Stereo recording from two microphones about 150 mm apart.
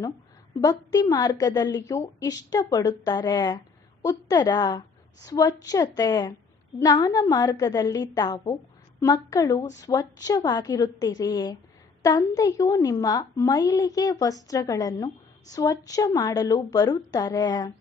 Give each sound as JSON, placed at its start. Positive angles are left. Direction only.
{"t": 0.6, "sound": "a woman's voice", "side_deg": 25}